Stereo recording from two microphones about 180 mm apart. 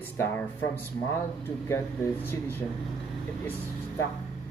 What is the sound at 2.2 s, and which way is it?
Speech, 10° left (ahead or behind).